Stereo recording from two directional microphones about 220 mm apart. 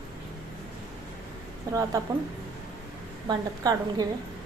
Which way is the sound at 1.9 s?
15° right (ahead or behind).